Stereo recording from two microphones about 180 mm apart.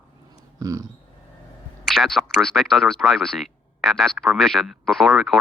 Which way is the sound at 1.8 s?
Centre (ahead or behind).